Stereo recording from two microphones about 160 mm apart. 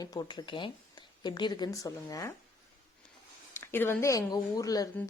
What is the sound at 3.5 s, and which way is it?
Speech, 15° left (ahead or behind).